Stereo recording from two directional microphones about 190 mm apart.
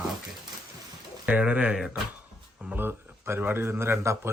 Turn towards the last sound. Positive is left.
turn(degrees=-15)  # may be behind; listen again after turning